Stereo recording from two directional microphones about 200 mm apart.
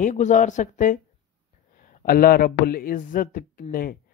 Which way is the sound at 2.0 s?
45° left (ahead or behind).